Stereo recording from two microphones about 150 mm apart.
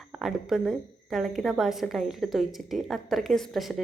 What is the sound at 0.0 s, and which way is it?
A woman's voice, centre (ahead or behind).